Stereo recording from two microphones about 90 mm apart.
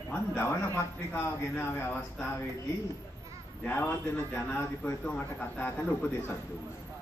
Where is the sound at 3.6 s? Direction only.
20° left (ahead or behind).